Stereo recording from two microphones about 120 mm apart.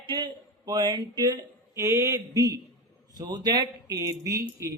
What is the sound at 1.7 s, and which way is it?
Speech, 25° right (ahead or behind).